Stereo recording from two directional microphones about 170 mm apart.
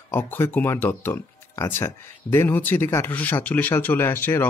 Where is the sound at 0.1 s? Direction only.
10° left (ahead or behind).